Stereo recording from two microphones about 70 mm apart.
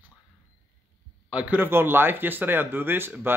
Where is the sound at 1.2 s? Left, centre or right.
Centre.